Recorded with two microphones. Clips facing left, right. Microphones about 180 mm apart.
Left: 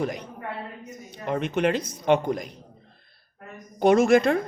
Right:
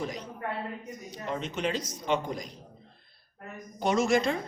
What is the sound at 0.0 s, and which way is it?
Speech, 55° left (ahead or behind).